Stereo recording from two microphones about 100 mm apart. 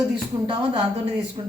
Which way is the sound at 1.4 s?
55° right (ahead or behind).